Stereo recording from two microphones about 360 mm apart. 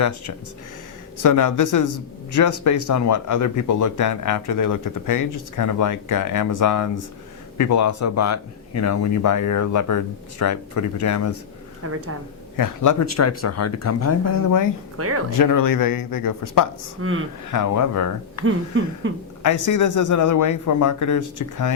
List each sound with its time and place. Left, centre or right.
1.2 s speech: left
11.8 s a sound: right
12.5 s speech: left
14.9 s speech: right
15.4 s speech: left
17.0 s a sound: right
17.5 s speech: left
18.4 s a sound: right
19.4 s speech: left